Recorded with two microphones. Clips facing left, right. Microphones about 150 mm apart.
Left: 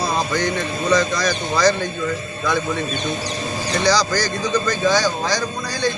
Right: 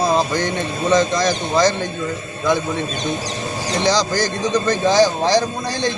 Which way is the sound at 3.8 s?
20° right (ahead or behind).